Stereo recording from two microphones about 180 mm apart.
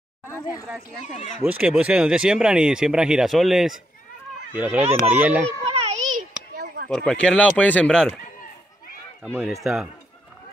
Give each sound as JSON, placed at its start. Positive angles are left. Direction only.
{"t": 1.4, "sound": "speech", "side_deg": -5}
{"t": 5.7, "sound": "children playing", "side_deg": -40}
{"t": 6.5, "sound": "a sound", "side_deg": -65}
{"t": 7.1, "sound": "speech", "side_deg": 5}
{"t": 9.4, "sound": "speech", "side_deg": 0}